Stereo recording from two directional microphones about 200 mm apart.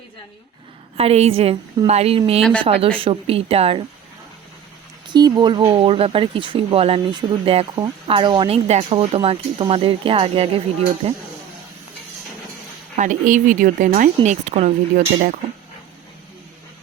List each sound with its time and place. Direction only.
0.9 s speech: 30° right (ahead or behind)
2.4 s speech: 5° left (ahead or behind)
3.0 s speech: 30° right (ahead or behind)
5.0 s speech: 20° right (ahead or behind)
13.0 s speech: 40° right (ahead or behind)